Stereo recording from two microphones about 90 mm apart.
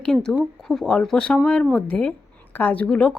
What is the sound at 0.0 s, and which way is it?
A woman's voice, 10° left (ahead or behind).